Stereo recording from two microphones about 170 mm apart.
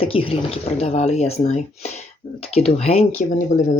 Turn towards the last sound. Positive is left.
turn(degrees=45)  # may be behind; listen again after turning